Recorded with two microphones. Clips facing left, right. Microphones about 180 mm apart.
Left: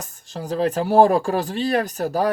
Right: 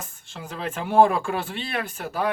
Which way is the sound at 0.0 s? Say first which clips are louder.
Left 6 dB; 40° left (ahead or behind).